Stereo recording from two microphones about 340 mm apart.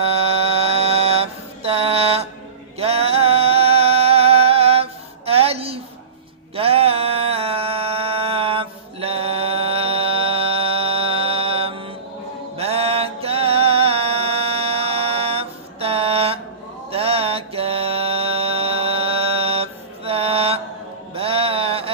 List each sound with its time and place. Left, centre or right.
0.0 s mantra: centre
2.7 s music: centre
6.6 s a sound: centre
12.5 s music: centre
16.9 s mantra: centre
21.2 s music: centre